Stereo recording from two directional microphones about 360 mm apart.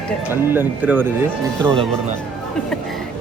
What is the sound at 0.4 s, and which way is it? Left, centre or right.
Speech, centre.